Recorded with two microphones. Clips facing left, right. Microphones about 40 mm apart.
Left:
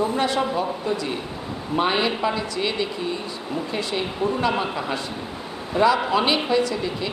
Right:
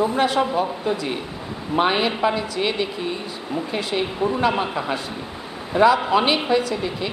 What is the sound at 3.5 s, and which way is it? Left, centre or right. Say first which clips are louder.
Speech: right 2 dB; centre.